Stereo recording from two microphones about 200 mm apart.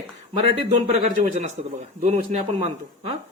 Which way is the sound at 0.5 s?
35° right (ahead or behind).